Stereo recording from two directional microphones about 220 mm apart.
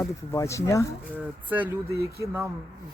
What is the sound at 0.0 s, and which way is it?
Speech, 15° left (ahead or behind).